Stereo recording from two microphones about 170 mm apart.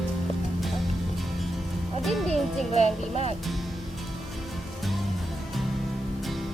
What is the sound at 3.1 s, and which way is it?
Speech, 40° right (ahead or behind).